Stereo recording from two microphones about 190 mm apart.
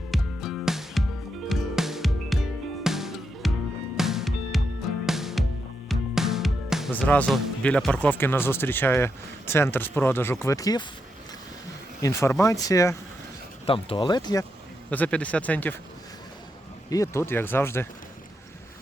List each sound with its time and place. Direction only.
0.1 s music: centre (ahead or behind)
6.9 s speech: 10° left (ahead or behind)
12.0 s speech: 15° left (ahead or behind)
13.7 s speech: 30° left (ahead or behind)
14.8 s speech: 10° left (ahead or behind)
16.9 s speech: 15° left (ahead or behind)